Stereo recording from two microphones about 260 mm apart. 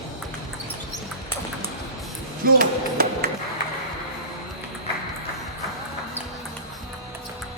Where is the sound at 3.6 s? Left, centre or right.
Left.